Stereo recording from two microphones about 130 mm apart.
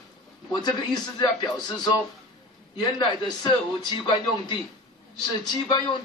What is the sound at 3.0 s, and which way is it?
A man's voice, 35° left (ahead or behind).